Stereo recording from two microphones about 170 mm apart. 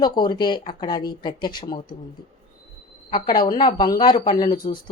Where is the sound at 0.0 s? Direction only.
25° left (ahead or behind).